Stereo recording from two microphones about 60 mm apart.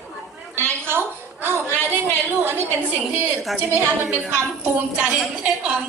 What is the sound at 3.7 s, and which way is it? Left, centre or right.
Speech, right.